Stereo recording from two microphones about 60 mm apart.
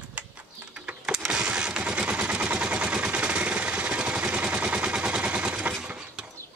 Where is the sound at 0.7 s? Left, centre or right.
Centre.